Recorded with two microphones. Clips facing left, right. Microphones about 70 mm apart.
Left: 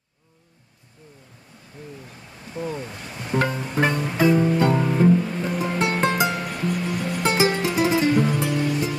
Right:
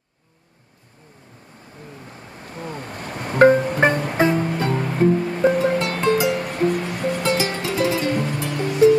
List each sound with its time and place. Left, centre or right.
2.0 s music: right
5.8 s music: left
6.0 s music: left
6.3 s music: right
7.2 s music: left
8.1 s music: right